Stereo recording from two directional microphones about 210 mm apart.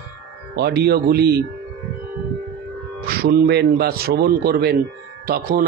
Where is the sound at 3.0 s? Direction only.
45° right (ahead or behind).